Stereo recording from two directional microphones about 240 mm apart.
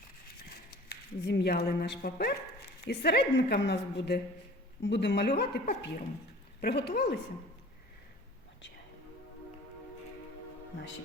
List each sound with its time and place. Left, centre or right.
0.9 s speech: left